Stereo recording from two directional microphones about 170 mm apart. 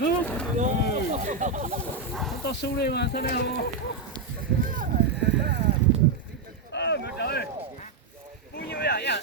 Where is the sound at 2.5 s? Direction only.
75° left (ahead or behind).